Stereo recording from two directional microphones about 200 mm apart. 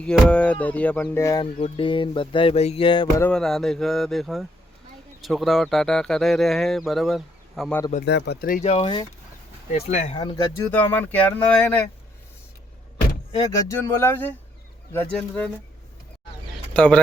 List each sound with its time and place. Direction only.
0.0 s music: 5° left (ahead or behind)
1.5 s a sound: 25° left (ahead or behind)
3.2 s speech: 5° left (ahead or behind)
8.0 s speech: 55° left (ahead or behind)
8.6 s a sound: 30° left (ahead or behind)
9.7 s speech: 30° left (ahead or behind)
10.2 s music: 20° left (ahead or behind)
13.5 s music: 15° left (ahead or behind)
16.7 s speech: 5° left (ahead or behind)